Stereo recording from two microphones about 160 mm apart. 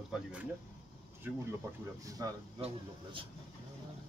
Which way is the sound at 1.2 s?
15° right (ahead or behind).